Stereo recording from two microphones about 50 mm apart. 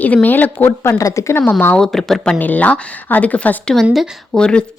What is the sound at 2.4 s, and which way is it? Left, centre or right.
Speech, left.